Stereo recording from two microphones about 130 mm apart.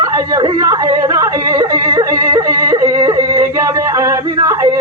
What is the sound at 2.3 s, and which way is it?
Yodeling, 25° right (ahead or behind).